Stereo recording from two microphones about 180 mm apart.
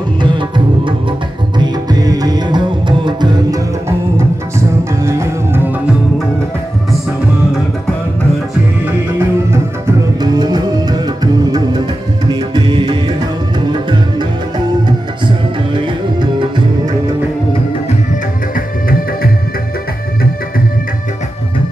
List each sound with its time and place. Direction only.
0.2 s music: 25° right (ahead or behind)
5.0 s music: 15° right (ahead or behind)
9.5 s music: 20° right (ahead or behind)
12.3 s music: 25° right (ahead or behind)
15.2 s music: 25° right (ahead or behind)